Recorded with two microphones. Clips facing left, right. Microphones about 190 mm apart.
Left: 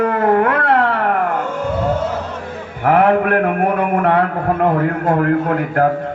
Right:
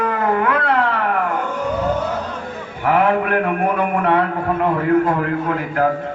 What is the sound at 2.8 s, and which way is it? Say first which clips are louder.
A man's voice: left 3 dB; 55° left (ahead or behind).